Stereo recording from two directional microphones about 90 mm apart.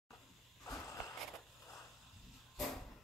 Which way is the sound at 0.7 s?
40° left (ahead or behind).